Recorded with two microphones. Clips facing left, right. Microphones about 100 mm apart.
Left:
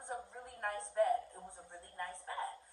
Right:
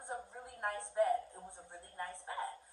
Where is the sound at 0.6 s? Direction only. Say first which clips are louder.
Even; 20° right (ahead or behind).